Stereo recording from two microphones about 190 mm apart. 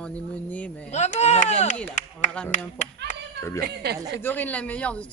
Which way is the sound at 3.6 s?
60° right (ahead or behind).